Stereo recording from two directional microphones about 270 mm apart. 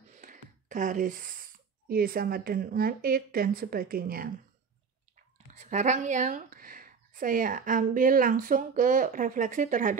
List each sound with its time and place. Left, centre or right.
0.1 s speech: right
5.5 s speech: right